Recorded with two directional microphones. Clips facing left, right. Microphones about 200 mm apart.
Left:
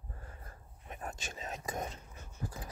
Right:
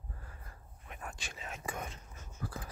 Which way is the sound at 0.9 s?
40° left (ahead or behind).